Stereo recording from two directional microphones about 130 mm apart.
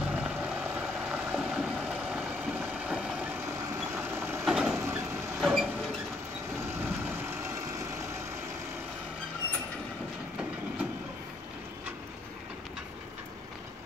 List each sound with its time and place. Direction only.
0.0 s vehicle: 10° right (ahead or behind)
4.5 s vehicle: 5° right (ahead or behind)
4.7 s vehicle: 20° right (ahead or behind)
5.4 s mechanisms: centre (ahead or behind)
6.7 s vehicle: 20° right (ahead or behind)